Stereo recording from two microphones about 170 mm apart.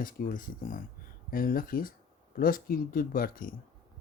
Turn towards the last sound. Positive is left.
turn(degrees=55)  # may be behind; listen again after turning